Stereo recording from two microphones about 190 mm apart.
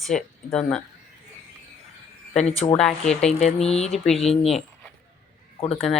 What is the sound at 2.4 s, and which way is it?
Speech, 35° left (ahead or behind).